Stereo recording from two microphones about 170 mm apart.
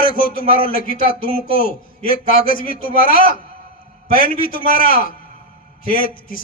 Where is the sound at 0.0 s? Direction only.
55° left (ahead or behind).